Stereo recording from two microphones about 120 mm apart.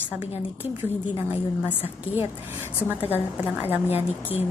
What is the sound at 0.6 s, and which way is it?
A woman's voice, 15° right (ahead or behind).